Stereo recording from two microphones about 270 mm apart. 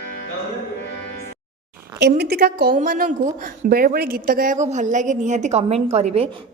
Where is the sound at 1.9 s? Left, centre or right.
Right.